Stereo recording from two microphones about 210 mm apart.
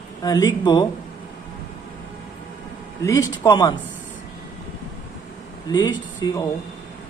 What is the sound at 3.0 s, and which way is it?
Speech, 15° left (ahead or behind).